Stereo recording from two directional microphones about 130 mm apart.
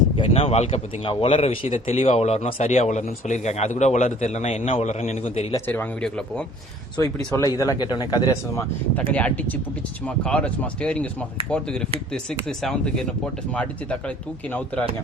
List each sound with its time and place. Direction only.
0.2 s speech: 50° left (ahead or behind)
5.6 s speech: 15° left (ahead or behind)
7.0 s speech: 20° left (ahead or behind)
9.0 s speech: 10° left (ahead or behind)